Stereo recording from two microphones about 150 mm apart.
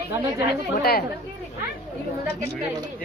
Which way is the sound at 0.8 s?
90° left.